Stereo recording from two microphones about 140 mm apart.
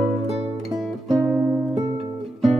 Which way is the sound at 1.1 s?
5° right (ahead or behind).